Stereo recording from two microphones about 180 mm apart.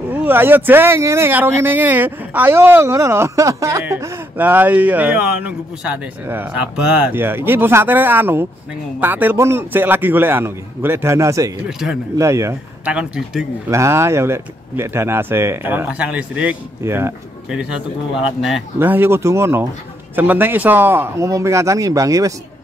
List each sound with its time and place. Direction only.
0.1 s speech: 10° right (ahead or behind)
13.7 s speech: 15° right (ahead or behind)